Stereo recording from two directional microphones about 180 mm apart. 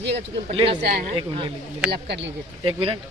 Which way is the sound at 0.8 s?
60° right (ahead or behind).